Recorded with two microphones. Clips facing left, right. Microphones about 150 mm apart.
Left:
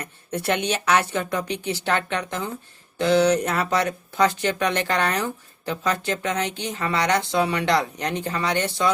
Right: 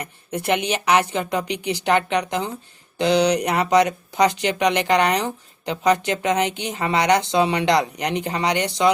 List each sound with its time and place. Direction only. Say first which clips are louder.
0.0 s a woman's voice: right 1 dB; 10° right (ahead or behind)